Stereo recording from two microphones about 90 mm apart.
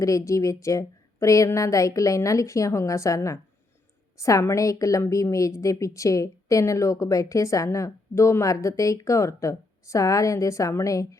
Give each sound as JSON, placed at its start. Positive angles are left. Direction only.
{"t": 0.0, "sound": "a woman's voice", "side_deg": 35}